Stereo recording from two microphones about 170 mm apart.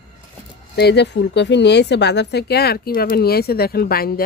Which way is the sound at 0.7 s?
80° left.